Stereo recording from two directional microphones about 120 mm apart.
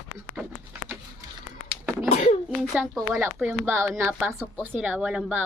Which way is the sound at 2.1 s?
65° left (ahead or behind).